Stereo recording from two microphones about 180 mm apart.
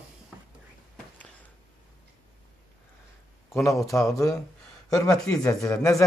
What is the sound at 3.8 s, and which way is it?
Speech, 15° left (ahead or behind).